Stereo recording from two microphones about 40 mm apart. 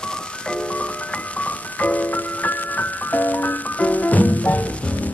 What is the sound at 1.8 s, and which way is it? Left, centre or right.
Music, left.